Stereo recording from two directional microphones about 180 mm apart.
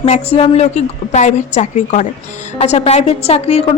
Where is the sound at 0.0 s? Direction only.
35° left (ahead or behind).